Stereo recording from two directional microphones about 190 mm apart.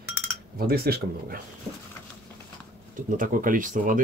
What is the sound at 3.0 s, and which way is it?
Speech, 45° right (ahead or behind).